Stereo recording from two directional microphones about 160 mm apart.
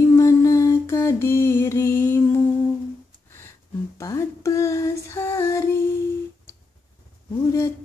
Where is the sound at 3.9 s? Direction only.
20° left (ahead or behind).